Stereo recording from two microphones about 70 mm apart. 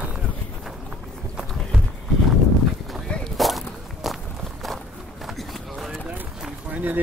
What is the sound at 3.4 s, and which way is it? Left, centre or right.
Walk, centre.